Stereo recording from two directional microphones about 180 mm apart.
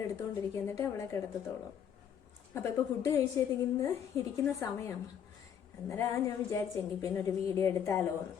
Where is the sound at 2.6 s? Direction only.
20° left (ahead or behind).